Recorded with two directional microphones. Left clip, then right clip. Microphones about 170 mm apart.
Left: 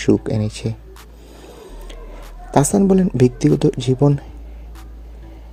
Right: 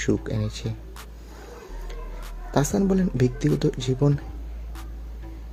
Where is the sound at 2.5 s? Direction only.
40° left (ahead or behind).